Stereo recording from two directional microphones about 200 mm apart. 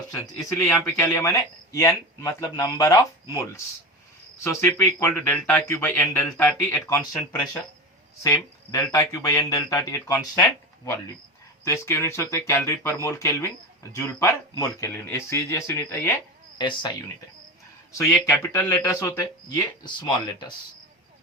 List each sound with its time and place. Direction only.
0.3 s speech: 15° left (ahead or behind)
11.6 s speech: 15° left (ahead or behind)
16.6 s speech: 25° left (ahead or behind)
17.9 s speech: 15° left (ahead or behind)